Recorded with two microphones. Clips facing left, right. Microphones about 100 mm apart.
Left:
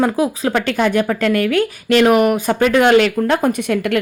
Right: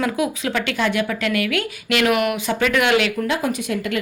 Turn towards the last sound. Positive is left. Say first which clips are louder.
# left 6 dB
turn(degrees=60)  # may be behind; listen again after turning